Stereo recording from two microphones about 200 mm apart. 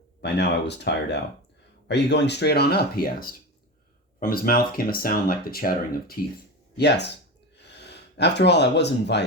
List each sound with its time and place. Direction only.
0.2 s speech: 60° left (ahead or behind)